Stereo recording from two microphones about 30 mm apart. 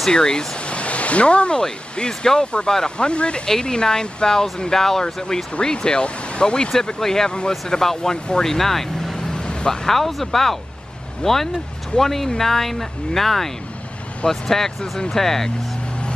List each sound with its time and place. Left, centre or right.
0.1 s speech: left
0.6 s speech: left
1.6 s speech: left
3.1 s speech: left; by 5.0 s centre
5.6 s speech: left
7.0 s speech: centre
7.2 s speech: left
8.5 s speech: centre
9.1 s vehicle: left
9.7 s speech: centre
11.2 s speech: left
12.0 s speech: centre